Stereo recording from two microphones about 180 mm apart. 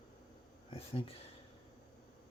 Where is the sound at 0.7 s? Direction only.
30° left (ahead or behind).